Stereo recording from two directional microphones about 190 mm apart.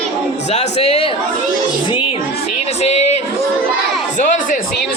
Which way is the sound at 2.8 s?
35° left (ahead or behind).